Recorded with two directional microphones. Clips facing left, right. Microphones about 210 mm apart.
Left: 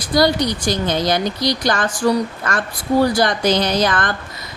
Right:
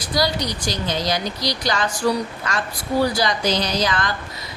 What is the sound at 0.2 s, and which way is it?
A woman's voice, 55° left (ahead or behind).